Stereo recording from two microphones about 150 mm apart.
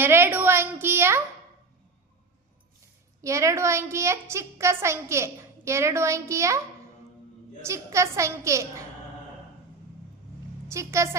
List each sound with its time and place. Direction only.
0.0 s a woman's voice: 15° right (ahead or behind)
3.2 s a woman's voice: 20° right (ahead or behind)
7.6 s a woman's voice: 20° right (ahead or behind)
10.7 s a woman's voice: 20° right (ahead or behind)